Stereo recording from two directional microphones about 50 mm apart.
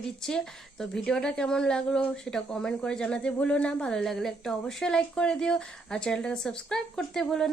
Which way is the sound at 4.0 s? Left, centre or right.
Centre.